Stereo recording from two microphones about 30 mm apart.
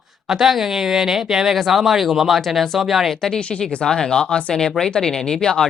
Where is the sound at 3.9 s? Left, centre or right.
Left.